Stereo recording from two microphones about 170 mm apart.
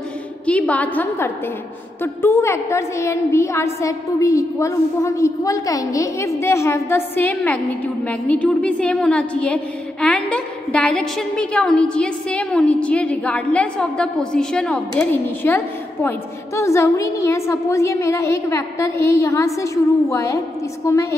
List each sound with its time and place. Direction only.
0.5 s a woman's voice: 10° left (ahead or behind)